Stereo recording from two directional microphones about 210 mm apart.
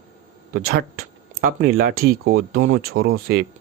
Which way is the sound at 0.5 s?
45° right (ahead or behind).